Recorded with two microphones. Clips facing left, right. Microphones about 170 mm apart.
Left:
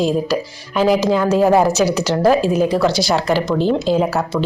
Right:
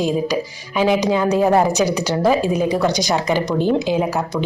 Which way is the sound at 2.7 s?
15° right (ahead or behind).